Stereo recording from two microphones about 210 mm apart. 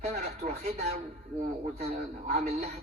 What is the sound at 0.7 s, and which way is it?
A man's voice, 30° right (ahead or behind).